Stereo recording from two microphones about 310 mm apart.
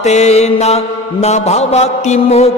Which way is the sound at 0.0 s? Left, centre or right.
Left.